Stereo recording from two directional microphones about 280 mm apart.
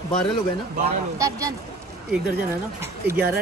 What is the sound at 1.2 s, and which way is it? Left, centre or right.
Speech, centre.